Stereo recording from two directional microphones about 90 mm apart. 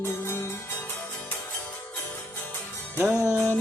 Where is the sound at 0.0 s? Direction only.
30° left (ahead or behind).